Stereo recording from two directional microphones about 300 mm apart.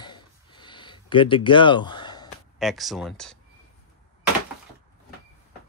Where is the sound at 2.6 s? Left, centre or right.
Centre.